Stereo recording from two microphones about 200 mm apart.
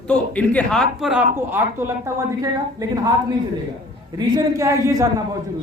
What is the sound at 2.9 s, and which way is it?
Speech, 20° right (ahead or behind).